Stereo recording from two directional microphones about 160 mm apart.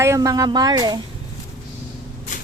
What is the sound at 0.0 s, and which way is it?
Speech, 20° right (ahead or behind).